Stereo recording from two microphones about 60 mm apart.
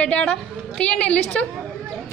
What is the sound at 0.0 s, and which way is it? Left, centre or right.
A woman's voice, centre.